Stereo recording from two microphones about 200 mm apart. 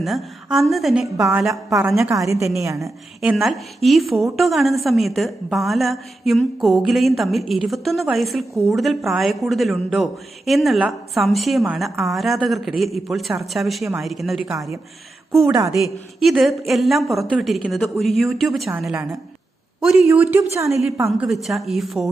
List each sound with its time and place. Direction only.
0.0 s a woman's voice: centre (ahead or behind)
2.1 s a woman's voice: 15° right (ahead or behind)
3.2 s a woman's voice: centre (ahead or behind)
15.4 s a woman's voice: 15° right (ahead or behind)
15.8 s a woman's voice: centre (ahead or behind)